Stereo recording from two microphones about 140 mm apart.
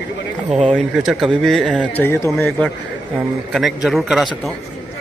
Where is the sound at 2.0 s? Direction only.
20° left (ahead or behind).